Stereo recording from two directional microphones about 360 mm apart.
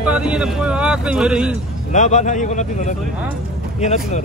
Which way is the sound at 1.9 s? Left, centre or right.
Centre.